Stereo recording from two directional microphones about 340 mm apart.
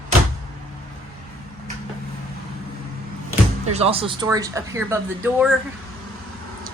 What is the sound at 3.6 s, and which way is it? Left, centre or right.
Speech, centre.